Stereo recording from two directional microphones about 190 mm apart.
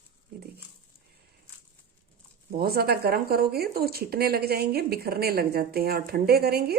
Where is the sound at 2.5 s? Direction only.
55° right (ahead or behind).